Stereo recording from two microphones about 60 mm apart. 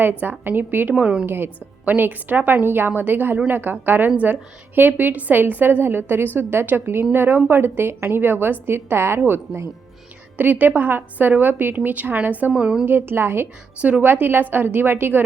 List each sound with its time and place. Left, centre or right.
0.0 s a woman's voice: right
1.8 s a woman's voice: right
12.8 s a woman's voice: right